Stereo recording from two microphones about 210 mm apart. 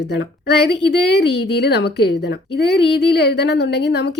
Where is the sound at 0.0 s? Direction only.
55° left (ahead or behind).